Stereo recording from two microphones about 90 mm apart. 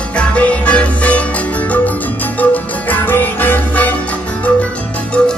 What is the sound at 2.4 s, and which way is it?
Music, 20° left (ahead or behind).